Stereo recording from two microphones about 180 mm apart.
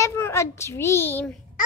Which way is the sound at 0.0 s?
15° left (ahead or behind).